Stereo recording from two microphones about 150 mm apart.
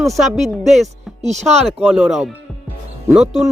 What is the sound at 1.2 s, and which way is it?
Speech, 50° right (ahead or behind).